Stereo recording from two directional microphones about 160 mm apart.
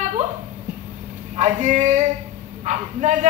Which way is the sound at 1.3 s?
45° right (ahead or behind).